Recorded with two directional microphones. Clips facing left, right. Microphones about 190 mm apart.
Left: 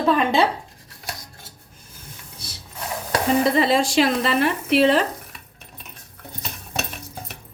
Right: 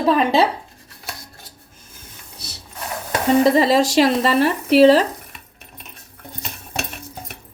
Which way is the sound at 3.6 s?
40° right (ahead or behind).